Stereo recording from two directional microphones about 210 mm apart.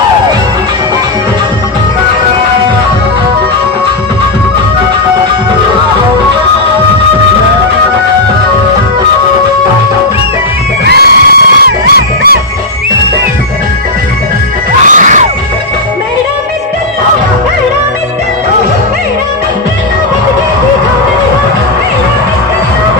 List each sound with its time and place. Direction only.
10.8 s music: 50° right (ahead or behind)
14.8 s music: 35° right (ahead or behind)